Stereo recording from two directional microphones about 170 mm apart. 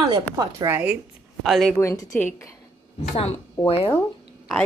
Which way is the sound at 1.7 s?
20° left (ahead or behind).